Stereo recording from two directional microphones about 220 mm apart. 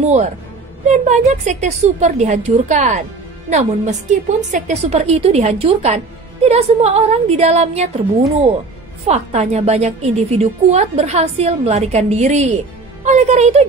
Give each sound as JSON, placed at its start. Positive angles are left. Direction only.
{"t": 0.0, "sound": "a woman's voice", "side_deg": -30}
{"t": 9.0, "sound": "a woman's voice", "side_deg": -30}